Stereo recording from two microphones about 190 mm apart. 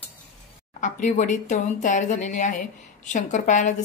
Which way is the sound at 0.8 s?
40° left (ahead or behind).